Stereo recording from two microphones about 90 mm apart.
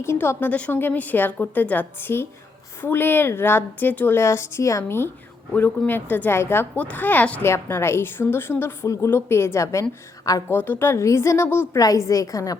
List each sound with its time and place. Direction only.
0.0 s a woman's voice: 30° left (ahead or behind)
7.4 s a woman's voice: 30° left (ahead or behind)
11.8 s a woman's voice: 40° left (ahead or behind)